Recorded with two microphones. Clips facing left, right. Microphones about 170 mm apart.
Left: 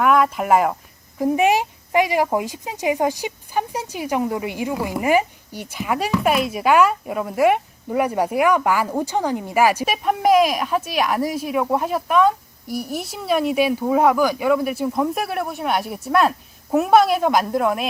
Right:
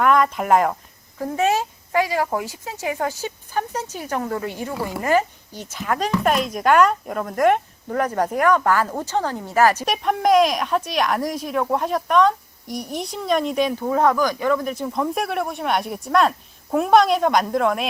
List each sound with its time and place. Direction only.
0.0 s speech: 5° left (ahead or behind)
1.2 s speech: 15° left (ahead or behind)